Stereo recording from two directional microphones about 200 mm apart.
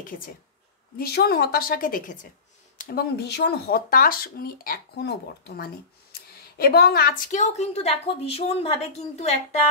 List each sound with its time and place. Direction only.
0.9 s a woman's voice: 50° left (ahead or behind); by 9.6 s 35° left (ahead or behind)